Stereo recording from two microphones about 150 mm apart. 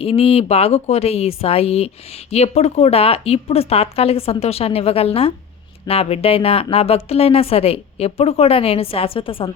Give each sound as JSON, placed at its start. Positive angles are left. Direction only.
{"t": 0.0, "sound": "a woman's voice", "side_deg": 40}